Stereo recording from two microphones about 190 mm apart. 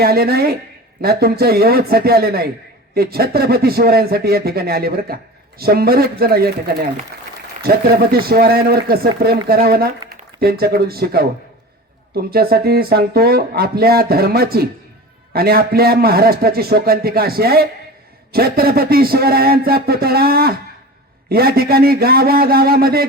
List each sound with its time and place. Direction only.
0.0 s speech: 55° right (ahead or behind)
7.6 s speech: 55° right (ahead or behind)